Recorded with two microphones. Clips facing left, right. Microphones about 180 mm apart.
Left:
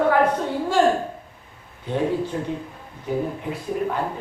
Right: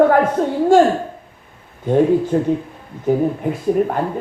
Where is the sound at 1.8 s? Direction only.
45° right (ahead or behind).